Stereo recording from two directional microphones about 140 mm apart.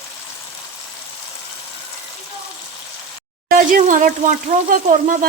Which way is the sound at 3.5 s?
80° right.